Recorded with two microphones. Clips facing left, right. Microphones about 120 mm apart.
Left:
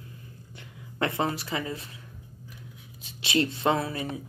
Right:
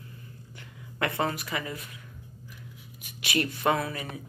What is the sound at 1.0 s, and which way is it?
Speech, 25° left (ahead or behind).